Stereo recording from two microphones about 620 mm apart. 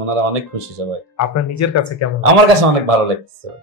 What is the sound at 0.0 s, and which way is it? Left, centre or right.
Speech, right.